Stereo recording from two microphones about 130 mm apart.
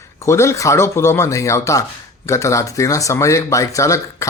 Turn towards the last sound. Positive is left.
turn(degrees=25)  # may be behind; listen again after turning